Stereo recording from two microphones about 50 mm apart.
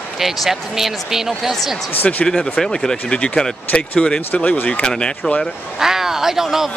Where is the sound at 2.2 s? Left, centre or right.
Centre; by 4.8 s left.